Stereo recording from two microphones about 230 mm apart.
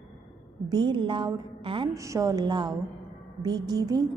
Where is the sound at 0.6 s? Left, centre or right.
Centre.